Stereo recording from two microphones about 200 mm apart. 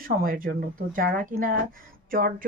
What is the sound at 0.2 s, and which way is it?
Speech, 45° right (ahead or behind).